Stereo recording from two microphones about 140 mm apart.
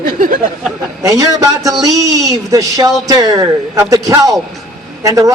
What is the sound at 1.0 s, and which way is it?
A man's voice, 25° right (ahead or behind).